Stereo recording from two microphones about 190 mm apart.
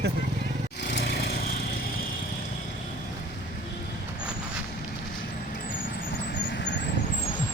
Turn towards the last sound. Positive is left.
turn(degrees=65)  # may be behind; listen again after turning